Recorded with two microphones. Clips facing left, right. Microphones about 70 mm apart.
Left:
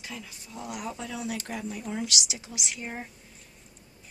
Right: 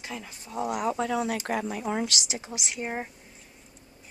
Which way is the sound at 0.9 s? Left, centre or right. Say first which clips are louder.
Right 7 dB; right.